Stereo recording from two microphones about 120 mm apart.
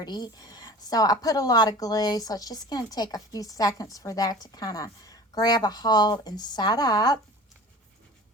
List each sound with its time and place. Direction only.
0.0 s speech: 35° left (ahead or behind)